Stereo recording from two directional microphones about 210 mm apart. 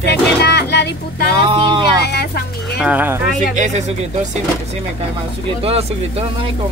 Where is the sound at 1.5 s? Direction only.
20° right (ahead or behind).